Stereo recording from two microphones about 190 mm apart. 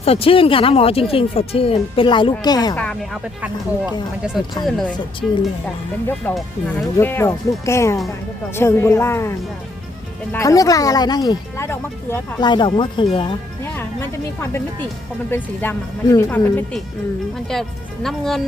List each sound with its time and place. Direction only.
0.0 s a woman's voice: 30° left (ahead or behind)
2.7 s speech: 5° left (ahead or behind)
4.6 s speech: 5° left (ahead or behind)
10.3 s a woman's voice: 20° left (ahead or behind)
13.6 s speech: 15° left (ahead or behind)
15.3 s speech: 10° left (ahead or behind)